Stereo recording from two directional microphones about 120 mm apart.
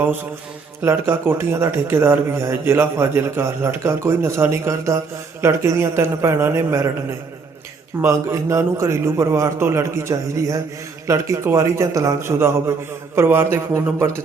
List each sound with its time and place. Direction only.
0.8 s speech: 20° right (ahead or behind)
8.0 s speech: 25° right (ahead or behind)